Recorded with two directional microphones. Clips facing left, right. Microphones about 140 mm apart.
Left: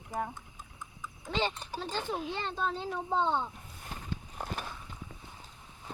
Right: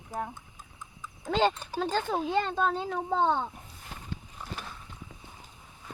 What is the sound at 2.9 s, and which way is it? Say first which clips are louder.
Speech: right 3 dB; 75° right (ahead or behind).